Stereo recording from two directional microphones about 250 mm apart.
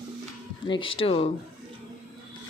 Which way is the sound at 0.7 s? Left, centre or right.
Centre.